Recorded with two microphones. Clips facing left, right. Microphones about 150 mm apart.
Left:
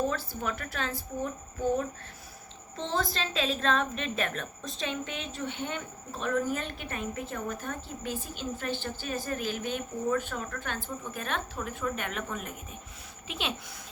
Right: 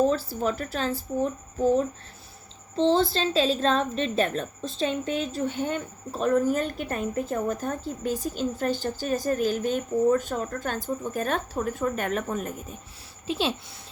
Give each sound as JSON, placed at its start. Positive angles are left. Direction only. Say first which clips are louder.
{"t": 0.0, "sound": "a woman's voice", "louder": "right 8 dB", "side_deg": -30}